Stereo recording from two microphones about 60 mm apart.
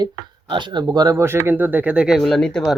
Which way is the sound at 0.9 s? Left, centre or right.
Right.